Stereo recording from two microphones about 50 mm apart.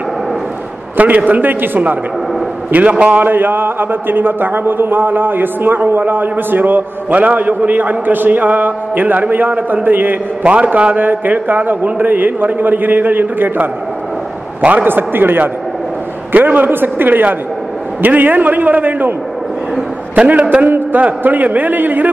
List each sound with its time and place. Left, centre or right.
0.9 s a man's voice: right
2.7 s a man's voice: right
3.2 s a man's voice: right
10.4 s a man's voice: right
14.9 s a man's voice: right
20.2 s a man's voice: right